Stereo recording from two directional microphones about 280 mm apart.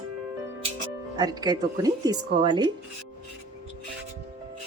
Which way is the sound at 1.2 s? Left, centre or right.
Centre.